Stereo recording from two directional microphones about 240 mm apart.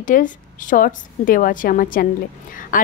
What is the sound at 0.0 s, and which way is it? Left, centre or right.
A woman's voice, left.